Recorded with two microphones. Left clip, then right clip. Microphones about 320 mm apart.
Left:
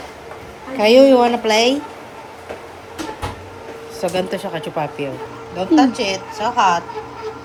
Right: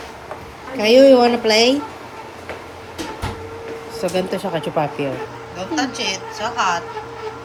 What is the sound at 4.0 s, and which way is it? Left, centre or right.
A woman's voice, centre.